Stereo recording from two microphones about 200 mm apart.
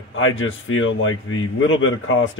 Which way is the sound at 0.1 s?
75° left (ahead or behind).